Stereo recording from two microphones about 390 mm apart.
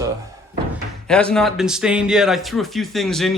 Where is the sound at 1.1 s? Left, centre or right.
Centre.